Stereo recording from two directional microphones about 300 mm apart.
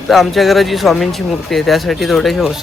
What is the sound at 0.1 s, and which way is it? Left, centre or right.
Speech, centre.